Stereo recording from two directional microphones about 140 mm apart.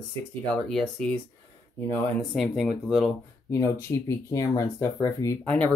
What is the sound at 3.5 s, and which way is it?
Speech, 25° left (ahead or behind).